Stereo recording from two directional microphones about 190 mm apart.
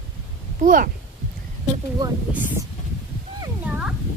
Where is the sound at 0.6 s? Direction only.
45° right (ahead or behind).